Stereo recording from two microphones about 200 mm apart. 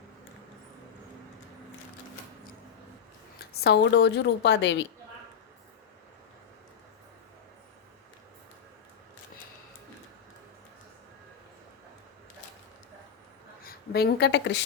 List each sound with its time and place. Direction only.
3.3 s a woman's voice: 50° left (ahead or behind)
13.7 s a woman's voice: 55° left (ahead or behind)